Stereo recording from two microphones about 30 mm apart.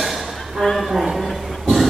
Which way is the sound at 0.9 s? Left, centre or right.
Centre.